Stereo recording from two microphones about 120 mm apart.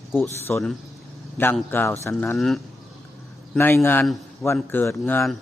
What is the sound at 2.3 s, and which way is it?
Speech, centre (ahead or behind).